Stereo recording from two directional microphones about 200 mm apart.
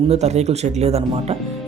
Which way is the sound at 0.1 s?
35° right (ahead or behind).